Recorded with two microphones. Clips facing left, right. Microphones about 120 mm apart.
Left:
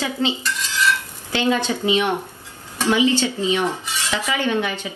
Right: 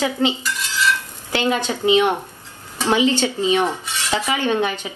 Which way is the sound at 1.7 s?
15° right (ahead or behind).